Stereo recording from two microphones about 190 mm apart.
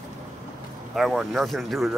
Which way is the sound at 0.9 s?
Centre (ahead or behind).